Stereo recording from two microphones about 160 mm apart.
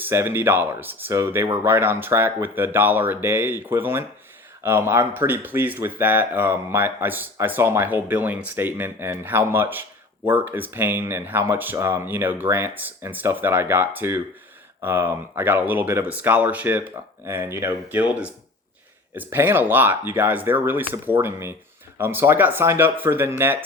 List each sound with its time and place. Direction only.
0.0 s speech: 15° right (ahead or behind)